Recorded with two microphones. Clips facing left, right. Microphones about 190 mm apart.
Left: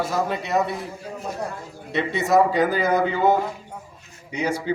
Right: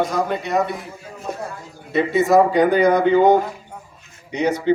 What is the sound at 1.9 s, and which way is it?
A man's voice, centre (ahead or behind).